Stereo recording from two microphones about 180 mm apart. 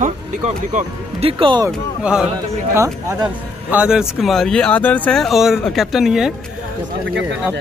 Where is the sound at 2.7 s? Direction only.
15° right (ahead or behind).